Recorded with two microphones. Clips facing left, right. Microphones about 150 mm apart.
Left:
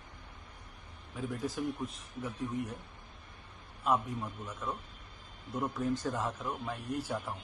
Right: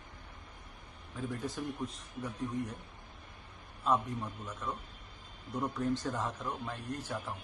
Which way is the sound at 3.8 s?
10° left (ahead or behind).